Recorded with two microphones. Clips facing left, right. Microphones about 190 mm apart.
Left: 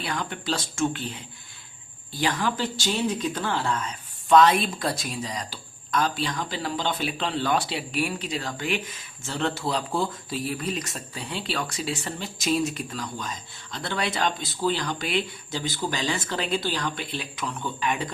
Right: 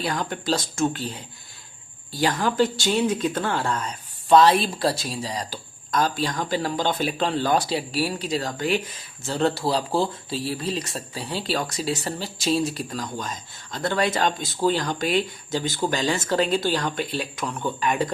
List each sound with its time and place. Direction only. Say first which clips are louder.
0.0 s speech: right 4 dB; 40° right (ahead or behind)